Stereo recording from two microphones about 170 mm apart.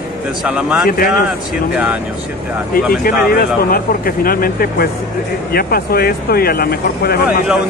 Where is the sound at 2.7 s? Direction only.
60° left (ahead or behind).